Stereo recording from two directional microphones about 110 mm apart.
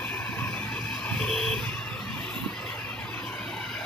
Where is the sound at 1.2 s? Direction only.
5° left (ahead or behind).